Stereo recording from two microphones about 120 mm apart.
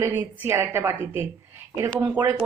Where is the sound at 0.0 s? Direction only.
15° right (ahead or behind).